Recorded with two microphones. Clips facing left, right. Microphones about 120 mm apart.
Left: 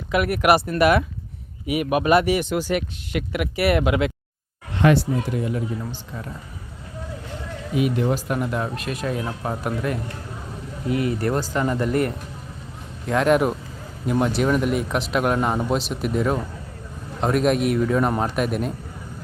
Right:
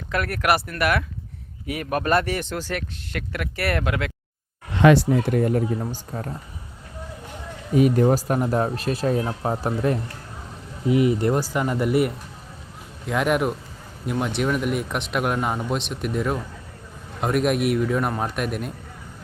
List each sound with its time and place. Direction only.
0.1 s speech: 15° left (ahead or behind)
5.3 s speech: 50° right (ahead or behind)
7.7 s speech: 40° right (ahead or behind)
10.8 s speech: 20° right (ahead or behind); by 18.7 s centre (ahead or behind)